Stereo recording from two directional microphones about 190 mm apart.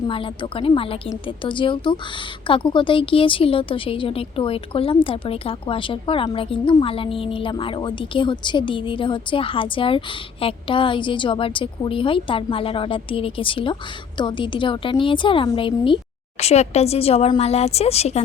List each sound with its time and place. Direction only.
0.1 s a woman's voice: 25° left (ahead or behind)